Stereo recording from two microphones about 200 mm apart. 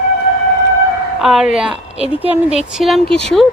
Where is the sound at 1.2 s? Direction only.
Centre (ahead or behind).